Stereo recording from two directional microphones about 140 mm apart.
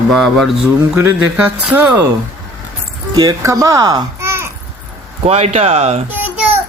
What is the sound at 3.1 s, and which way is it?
A child's voice, 25° right (ahead or behind).